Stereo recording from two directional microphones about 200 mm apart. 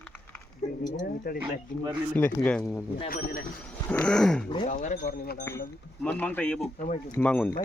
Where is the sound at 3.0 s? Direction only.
45° left (ahead or behind).